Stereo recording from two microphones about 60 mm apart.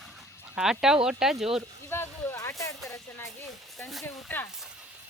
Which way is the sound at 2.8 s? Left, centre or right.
Left.